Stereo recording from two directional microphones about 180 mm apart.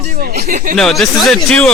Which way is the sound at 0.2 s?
55° right (ahead or behind).